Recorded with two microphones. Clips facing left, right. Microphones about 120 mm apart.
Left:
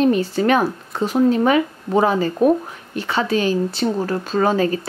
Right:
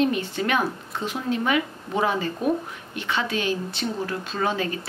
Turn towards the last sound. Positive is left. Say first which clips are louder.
# left 8 dB
turn(degrees=40)  # may be behind; listen again after turning